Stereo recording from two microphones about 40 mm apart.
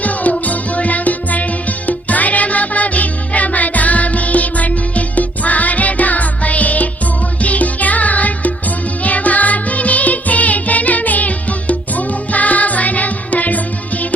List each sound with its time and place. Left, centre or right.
0.0 s music: left